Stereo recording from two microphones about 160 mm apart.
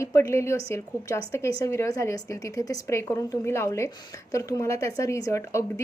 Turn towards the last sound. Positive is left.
turn(degrees=20)  # may be behind; listen again after turning